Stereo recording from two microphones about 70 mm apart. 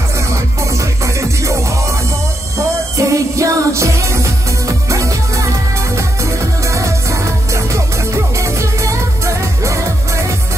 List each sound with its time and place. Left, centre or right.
0.7 s music: right
3.0 s music: right
6.7 s music: right